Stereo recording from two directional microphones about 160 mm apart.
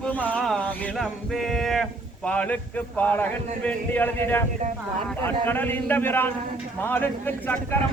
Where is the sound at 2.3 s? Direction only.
10° left (ahead or behind).